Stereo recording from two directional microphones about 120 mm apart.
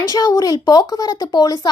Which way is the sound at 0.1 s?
30° left (ahead or behind).